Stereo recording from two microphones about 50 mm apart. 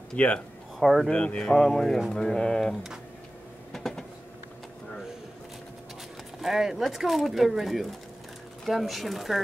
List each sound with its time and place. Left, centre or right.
0.2 s speech: left
0.7 s speech: centre
1.1 s speech: left
2.7 s speech: centre
3.7 s train: centre
6.4 s speech: centre